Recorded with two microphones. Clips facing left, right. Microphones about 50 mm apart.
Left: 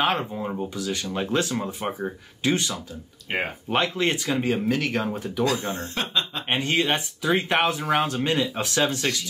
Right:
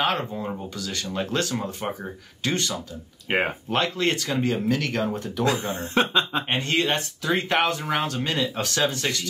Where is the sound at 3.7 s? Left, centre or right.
Centre.